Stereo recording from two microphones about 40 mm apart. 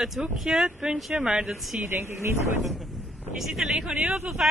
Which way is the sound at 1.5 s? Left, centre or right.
Centre.